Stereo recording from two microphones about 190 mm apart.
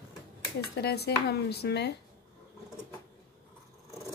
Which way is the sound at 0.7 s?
60° left (ahead or behind).